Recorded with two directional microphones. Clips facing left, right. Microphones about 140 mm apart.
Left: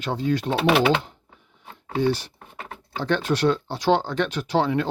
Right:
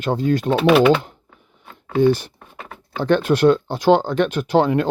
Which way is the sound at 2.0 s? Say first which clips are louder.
Right 7 dB; 50° right (ahead or behind).